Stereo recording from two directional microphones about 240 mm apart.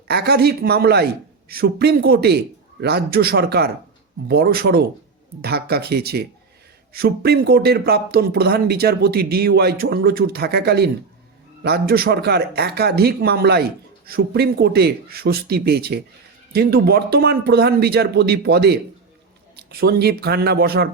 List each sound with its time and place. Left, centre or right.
0.1 s speech: right